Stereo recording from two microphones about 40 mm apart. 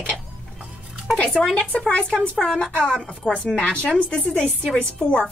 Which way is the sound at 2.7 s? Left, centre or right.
Left.